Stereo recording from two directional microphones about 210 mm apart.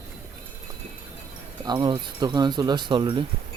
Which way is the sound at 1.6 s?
20° right (ahead or behind).